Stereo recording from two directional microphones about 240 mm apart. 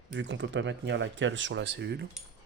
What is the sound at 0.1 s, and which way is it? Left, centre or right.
Speech, right.